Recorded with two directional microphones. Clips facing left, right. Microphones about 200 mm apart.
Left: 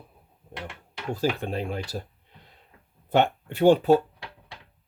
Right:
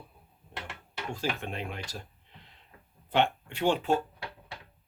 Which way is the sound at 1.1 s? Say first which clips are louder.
Left 8 dB; 35° left (ahead or behind).